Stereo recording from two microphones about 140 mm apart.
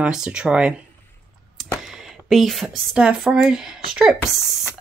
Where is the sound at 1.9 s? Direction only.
Centre (ahead or behind).